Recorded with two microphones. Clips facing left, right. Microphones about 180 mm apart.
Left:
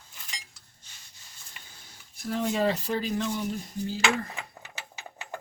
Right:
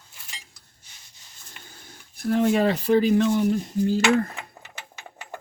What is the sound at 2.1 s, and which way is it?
Speech, 60° right (ahead or behind).